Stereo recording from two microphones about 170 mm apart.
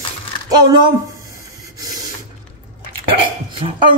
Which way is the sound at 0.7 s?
25° right (ahead or behind).